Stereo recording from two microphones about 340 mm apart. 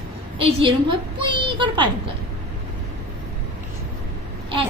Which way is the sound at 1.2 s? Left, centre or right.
Centre.